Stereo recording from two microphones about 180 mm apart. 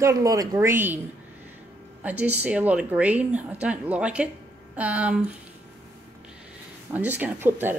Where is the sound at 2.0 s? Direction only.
10° right (ahead or behind).